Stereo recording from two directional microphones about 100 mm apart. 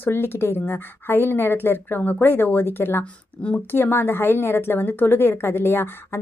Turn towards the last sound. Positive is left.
turn(degrees=25)  # may be behind; listen again after turning